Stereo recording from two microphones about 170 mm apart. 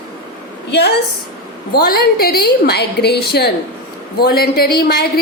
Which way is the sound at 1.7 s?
65° left (ahead or behind).